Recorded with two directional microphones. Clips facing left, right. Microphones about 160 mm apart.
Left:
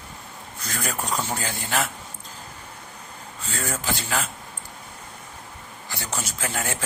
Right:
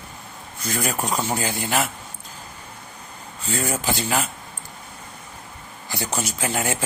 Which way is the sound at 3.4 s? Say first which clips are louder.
Right 5 dB; 10° right (ahead or behind).